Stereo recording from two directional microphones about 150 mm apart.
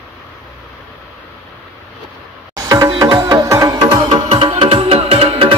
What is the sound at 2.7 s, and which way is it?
Music, 20° right (ahead or behind).